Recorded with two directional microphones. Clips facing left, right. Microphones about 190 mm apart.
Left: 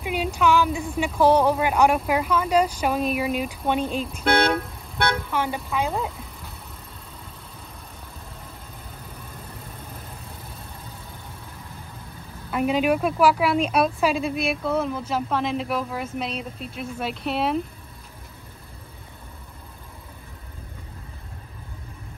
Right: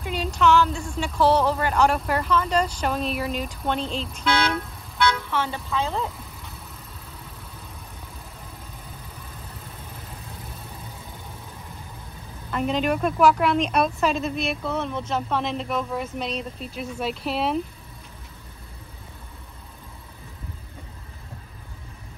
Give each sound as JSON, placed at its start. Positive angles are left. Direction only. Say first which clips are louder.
{"t": 0.0, "sound": "a sound", "louder": "even", "side_deg": 10}
{"t": 0.9, "sound": "speech", "louder": "left 2 dB", "side_deg": 15}
{"t": 4.0, "sound": "speech", "louder": "left 3 dB", "side_deg": 55}
{"t": 5.3, "sound": "speech", "louder": "left 1 dB", "side_deg": 15}
{"t": 5.9, "sound": "vehicle", "louder": "left 1 dB", "side_deg": 0}
{"t": 12.4, "sound": "a woman's voice", "louder": "left 2 dB", "side_deg": 10}